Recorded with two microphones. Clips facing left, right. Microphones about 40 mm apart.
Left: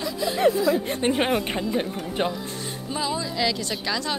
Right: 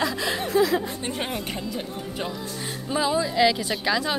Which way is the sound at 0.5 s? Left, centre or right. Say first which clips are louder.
Right 1 dB; right.